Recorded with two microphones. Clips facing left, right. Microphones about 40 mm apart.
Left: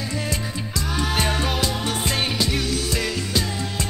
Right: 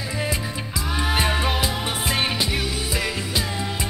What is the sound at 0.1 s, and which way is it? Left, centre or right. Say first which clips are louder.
Music: right 4 dB; centre.